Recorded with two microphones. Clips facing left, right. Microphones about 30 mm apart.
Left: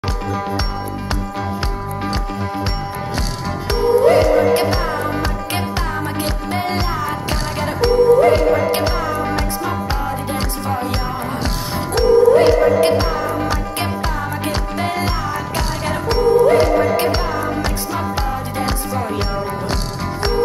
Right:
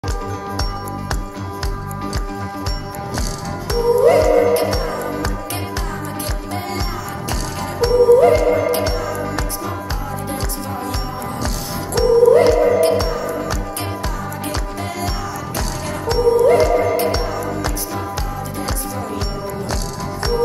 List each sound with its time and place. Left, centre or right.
3.6 s music: left
11.9 s music: left